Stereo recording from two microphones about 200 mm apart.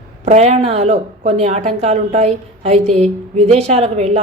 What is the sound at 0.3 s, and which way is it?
A woman's voice, 35° right (ahead or behind).